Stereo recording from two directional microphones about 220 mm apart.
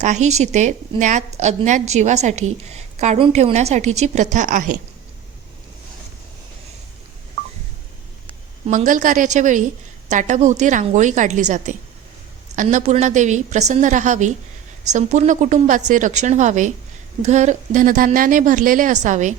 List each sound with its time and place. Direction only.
0.0 s a woman's voice: 30° right (ahead or behind)
8.6 s a woman's voice: 35° right (ahead or behind)